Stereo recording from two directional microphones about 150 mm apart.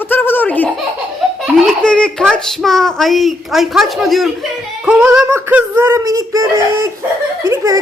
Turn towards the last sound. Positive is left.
turn(degrees=-20)  # may be behind; listen again after turning